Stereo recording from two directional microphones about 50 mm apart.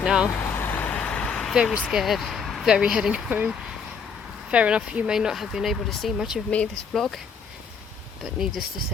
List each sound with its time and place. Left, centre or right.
0.0 s vehicle: centre
0.3 s vehicle: left
0.9 s vehicle: left
1.8 s speech: centre
3.2 s speech: right
4.5 s speech: right
5.1 s speech: centre
6.1 s speech: centre
6.5 s speech: left
8.2 s speech: centre